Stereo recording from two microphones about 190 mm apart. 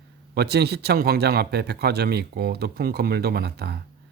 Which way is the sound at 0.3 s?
60° right (ahead or behind).